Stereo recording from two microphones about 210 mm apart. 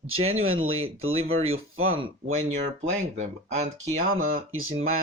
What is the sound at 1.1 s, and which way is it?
Speech, 30° right (ahead or behind).